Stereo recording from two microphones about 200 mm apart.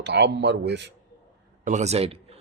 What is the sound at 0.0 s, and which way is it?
Speech, 60° right (ahead or behind).